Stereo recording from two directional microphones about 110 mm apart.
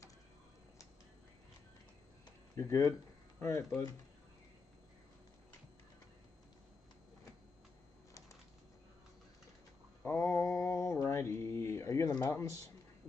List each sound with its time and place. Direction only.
2.5 s speech: 25° left (ahead or behind)
10.0 s mantra: 20° left (ahead or behind)